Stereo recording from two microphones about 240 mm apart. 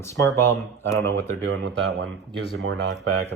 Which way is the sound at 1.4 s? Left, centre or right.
Right.